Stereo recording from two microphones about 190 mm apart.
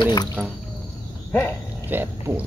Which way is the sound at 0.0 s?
20° left (ahead or behind).